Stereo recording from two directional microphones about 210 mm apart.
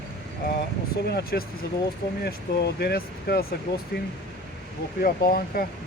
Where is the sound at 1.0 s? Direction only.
50° left (ahead or behind).